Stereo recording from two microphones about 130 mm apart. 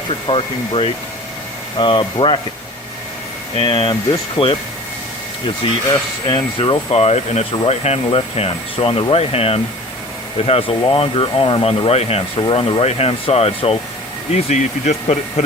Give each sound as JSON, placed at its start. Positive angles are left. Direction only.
{"t": 0.3, "sound": "speech", "side_deg": 45}
{"t": 3.6, "sound": "speech", "side_deg": 40}
{"t": 5.6, "sound": "speech", "side_deg": 40}
{"t": 14.3, "sound": "speech", "side_deg": 60}